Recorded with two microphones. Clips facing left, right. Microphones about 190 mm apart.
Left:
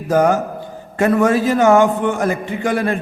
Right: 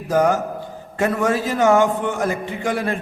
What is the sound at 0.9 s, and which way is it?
A man's voice, 55° left (ahead or behind).